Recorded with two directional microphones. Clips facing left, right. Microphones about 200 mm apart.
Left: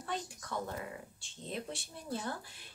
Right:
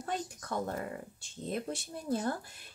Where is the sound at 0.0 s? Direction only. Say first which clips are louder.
Right 3 dB; 45° right (ahead or behind).